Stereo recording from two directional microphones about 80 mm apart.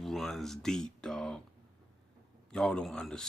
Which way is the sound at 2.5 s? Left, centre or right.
Centre.